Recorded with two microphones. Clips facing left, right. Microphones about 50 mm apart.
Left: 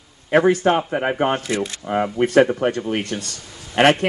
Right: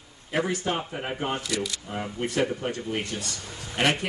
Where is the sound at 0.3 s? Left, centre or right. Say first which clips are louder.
Left 11 dB; left.